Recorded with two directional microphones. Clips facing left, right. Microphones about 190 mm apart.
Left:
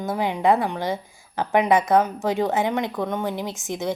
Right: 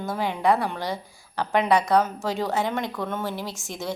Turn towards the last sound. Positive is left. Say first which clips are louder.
# left 5 dB
turn(degrees=20)  # may be behind; listen again after turning